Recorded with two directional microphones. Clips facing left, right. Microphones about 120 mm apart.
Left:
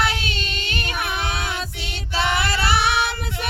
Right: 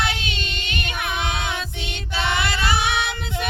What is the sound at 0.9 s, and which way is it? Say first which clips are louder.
Music: even; 20° right (ahead or behind).